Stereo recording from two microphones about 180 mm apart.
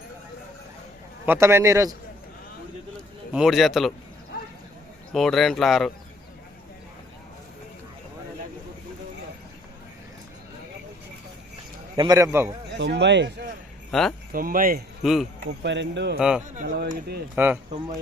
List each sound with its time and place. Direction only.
1.2 s a man's voice: 15° right (ahead or behind)
3.3 s speech: centre (ahead or behind)
5.1 s speech: centre (ahead or behind)
11.9 s a man's voice: 20° right (ahead or behind)
12.7 s speech: 75° right (ahead or behind)
13.9 s speech: centre (ahead or behind)
14.3 s speech: 50° right (ahead or behind)
15.0 s speech: centre (ahead or behind)
15.6 s speech: 75° right (ahead or behind)
16.1 s speech: 5° right (ahead or behind)
16.6 s speech: 65° right (ahead or behind)
17.3 s a man's voice: 10° right (ahead or behind)